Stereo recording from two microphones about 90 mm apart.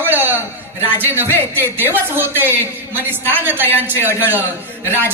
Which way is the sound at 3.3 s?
20° right (ahead or behind).